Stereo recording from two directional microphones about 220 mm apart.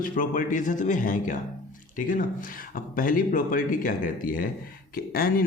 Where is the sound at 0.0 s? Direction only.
40° left (ahead or behind).